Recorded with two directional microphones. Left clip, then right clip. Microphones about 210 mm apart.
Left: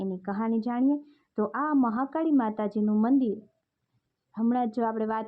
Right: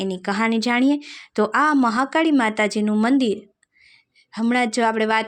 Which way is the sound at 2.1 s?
20° right (ahead or behind).